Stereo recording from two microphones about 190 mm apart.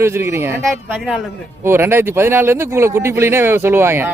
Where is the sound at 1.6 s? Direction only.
15° right (ahead or behind).